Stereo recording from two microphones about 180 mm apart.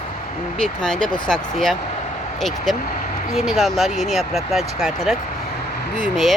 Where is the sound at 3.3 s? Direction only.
Centre (ahead or behind).